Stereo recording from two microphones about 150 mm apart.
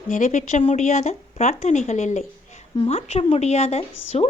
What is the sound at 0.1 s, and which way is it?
Speech, 55° left (ahead or behind).